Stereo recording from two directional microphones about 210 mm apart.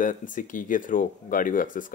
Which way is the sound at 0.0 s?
40° left (ahead or behind).